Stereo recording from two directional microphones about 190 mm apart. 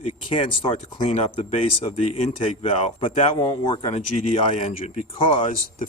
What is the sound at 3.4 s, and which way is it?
Speech, 20° left (ahead or behind).